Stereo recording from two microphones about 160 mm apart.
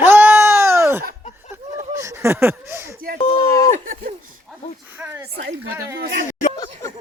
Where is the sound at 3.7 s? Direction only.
55° right (ahead or behind).